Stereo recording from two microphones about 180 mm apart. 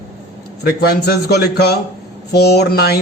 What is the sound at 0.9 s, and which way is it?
A man's voice, 65° left (ahead or behind).